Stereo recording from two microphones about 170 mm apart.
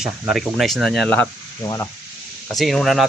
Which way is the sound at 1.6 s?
20° left (ahead or behind).